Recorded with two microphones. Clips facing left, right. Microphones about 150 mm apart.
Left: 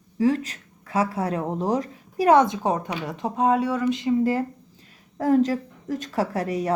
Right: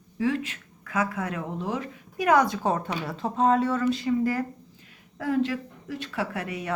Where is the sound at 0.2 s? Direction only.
40° left (ahead or behind).